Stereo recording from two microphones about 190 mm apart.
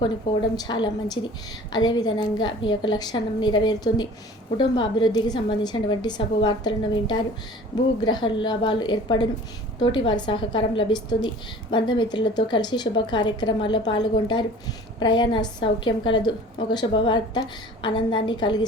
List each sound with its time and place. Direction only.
0.5 s a woman's voice: 20° left (ahead or behind)